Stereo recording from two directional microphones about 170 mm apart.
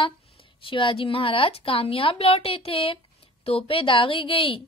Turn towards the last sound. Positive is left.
turn(degrees=30)  # may be behind; listen again after turning